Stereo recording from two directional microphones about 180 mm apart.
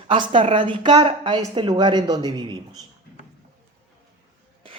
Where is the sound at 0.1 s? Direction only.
25° right (ahead or behind).